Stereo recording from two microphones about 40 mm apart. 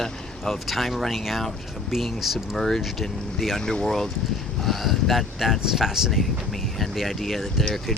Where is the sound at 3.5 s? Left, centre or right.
Centre.